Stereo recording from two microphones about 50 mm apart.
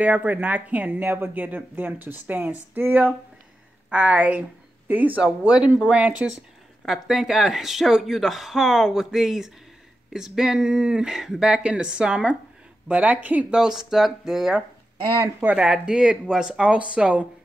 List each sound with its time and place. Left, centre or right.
0.0 s speech: right
2.2 s speech: right
3.9 s speech: right
5.4 s speech: right
6.9 s speech: centre; by 13.5 s right
13.5 s speech: centre
15.5 s speech: centre
16.7 s speech: right